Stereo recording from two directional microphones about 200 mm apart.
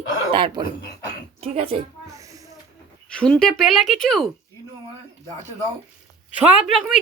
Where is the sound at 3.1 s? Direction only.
5° left (ahead or behind).